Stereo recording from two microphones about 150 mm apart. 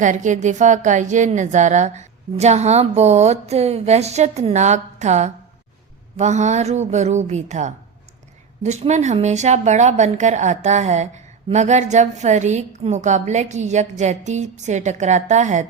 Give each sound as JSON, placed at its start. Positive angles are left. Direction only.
{"t": 0.0, "sound": "a woman's voice", "side_deg": -55}